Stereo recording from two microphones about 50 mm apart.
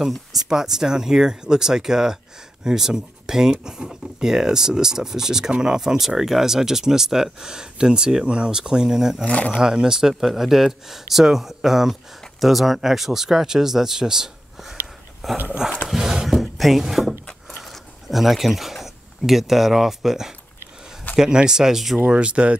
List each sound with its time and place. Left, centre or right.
0.1 s speech: centre
9.2 s speech: left
9.6 s speech: centre
15.9 s a sound: centre
16.8 s speech: centre
17.5 s a sound: centre
21.2 s speech: centre
22.1 s speech: right